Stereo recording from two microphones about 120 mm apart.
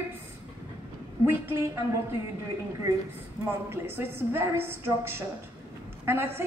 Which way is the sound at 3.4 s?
20° right (ahead or behind).